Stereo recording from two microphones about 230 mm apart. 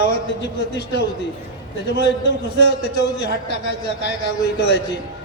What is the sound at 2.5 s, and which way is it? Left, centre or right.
A man's voice, left.